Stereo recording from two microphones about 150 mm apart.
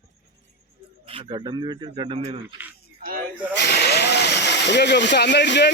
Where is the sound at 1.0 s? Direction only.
35° right (ahead or behind).